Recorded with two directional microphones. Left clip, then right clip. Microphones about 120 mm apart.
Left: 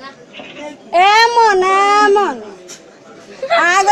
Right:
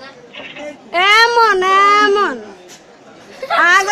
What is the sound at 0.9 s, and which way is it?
A child's voice, 15° right (ahead or behind).